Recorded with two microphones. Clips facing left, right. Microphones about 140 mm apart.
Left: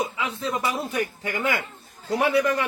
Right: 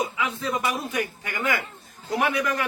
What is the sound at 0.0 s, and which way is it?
Speech, 25° left (ahead or behind).